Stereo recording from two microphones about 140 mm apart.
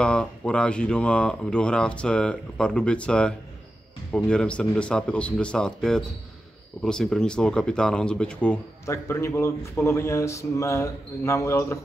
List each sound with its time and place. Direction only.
0.0 s speech: 5° left (ahead or behind)
8.8 s speech: 20° left (ahead or behind)